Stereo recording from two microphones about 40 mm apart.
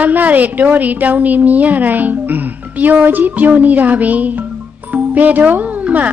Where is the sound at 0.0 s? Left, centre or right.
Right.